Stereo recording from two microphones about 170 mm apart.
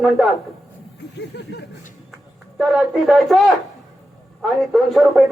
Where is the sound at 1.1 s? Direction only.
85° left.